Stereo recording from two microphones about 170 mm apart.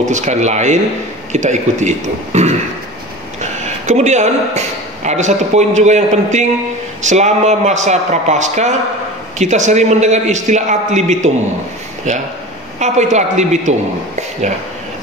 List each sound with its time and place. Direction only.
0.0 s a man's voice: 45° right (ahead or behind)